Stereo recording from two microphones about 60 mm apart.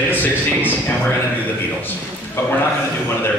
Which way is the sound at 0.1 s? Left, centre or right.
Left.